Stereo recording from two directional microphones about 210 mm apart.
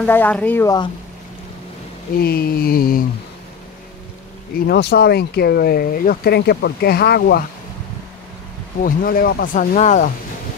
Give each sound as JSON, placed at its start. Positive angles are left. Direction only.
{"t": 0.0, "sound": "speech", "side_deg": 5}
{"t": 2.1, "sound": "speech", "side_deg": 45}
{"t": 4.6, "sound": "speech", "side_deg": 50}
{"t": 8.8, "sound": "speech", "side_deg": 45}